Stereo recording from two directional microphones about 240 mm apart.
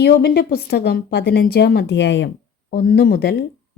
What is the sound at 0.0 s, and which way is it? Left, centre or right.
A woman's voice, left.